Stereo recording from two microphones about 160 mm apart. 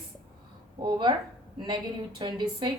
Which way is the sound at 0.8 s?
25° right (ahead or behind).